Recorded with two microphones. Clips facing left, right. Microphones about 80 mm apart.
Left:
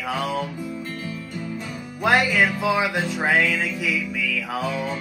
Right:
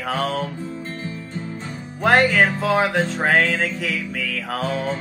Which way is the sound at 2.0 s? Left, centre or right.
Right.